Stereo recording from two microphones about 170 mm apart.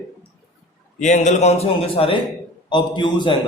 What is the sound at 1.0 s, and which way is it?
A man's voice, 45° left (ahead or behind).